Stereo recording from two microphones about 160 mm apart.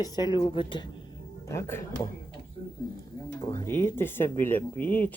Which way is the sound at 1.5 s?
15° left (ahead or behind).